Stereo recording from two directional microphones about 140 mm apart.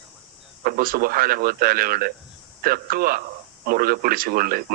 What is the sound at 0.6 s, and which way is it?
A man's voice, 90° right.